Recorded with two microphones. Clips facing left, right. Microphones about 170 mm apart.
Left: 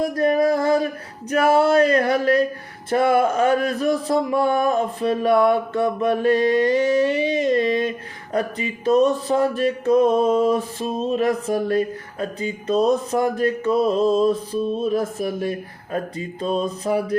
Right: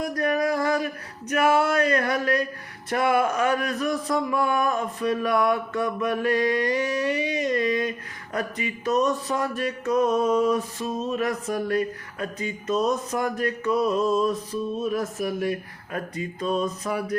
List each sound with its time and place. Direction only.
0.0 s speech: 30° left (ahead or behind)
1.3 s a sound: 30° left (ahead or behind)
2.9 s speech: 30° left (ahead or behind)